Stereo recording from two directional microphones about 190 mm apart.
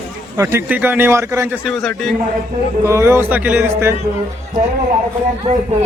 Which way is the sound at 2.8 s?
15° right (ahead or behind).